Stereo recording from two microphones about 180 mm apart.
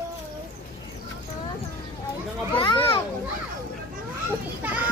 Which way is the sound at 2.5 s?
25° left (ahead or behind).